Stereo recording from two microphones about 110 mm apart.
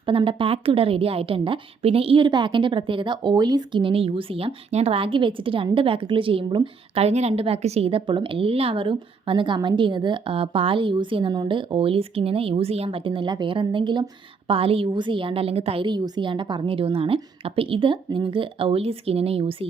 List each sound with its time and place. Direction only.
0.0 s a woman's voice: 50° right (ahead or behind)
7.0 s a woman's voice: 80° right; by 15.9 s 60° right (ahead or behind)
15.9 s a woman's voice: 45° right (ahead or behind); by 19.5 s 60° right (ahead or behind)